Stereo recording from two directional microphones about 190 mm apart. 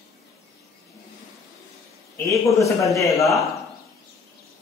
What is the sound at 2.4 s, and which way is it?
Speech, 15° left (ahead or behind).